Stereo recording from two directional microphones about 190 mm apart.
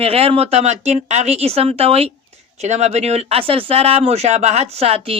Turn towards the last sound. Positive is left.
turn(degrees=-30)  # may be behind; listen again after turning